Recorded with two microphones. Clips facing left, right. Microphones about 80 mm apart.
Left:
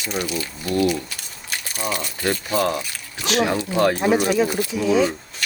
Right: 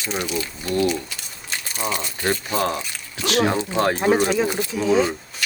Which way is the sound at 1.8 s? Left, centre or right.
Right.